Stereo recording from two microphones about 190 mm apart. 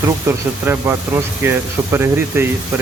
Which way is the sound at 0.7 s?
10° right (ahead or behind).